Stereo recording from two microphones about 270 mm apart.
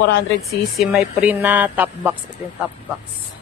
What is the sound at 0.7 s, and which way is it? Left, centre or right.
Speech, centre.